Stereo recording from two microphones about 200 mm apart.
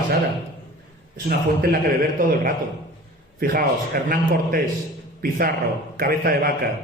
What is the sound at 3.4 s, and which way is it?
A man's voice, 45° right (ahead or behind).